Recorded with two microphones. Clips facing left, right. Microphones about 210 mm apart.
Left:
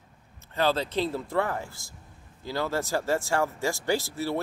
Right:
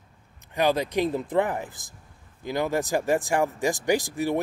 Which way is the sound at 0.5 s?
15° right (ahead or behind).